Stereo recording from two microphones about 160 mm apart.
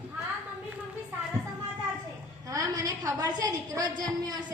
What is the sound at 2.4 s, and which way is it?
A woman's voice, 20° right (ahead or behind).